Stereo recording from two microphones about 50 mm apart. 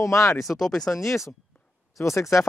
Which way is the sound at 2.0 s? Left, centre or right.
Left.